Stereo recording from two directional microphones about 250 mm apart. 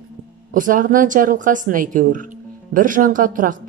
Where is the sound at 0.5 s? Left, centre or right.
Right.